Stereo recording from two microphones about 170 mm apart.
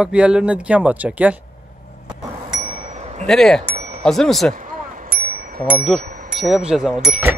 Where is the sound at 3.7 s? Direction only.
45° right (ahead or behind).